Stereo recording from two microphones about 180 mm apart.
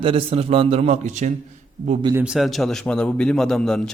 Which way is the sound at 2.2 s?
5° right (ahead or behind).